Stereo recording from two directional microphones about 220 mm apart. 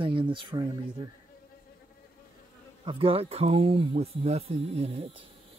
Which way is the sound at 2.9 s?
25° right (ahead or behind).